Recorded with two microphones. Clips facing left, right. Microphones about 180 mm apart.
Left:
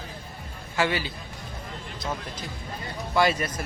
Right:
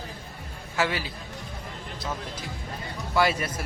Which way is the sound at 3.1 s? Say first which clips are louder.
Left 1 dB; 5° right (ahead or behind).